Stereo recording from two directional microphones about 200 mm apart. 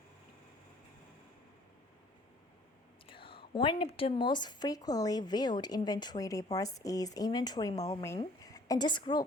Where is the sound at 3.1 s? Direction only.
25° left (ahead or behind).